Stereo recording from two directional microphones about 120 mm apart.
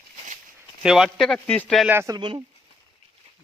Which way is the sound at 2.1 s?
40° right (ahead or behind).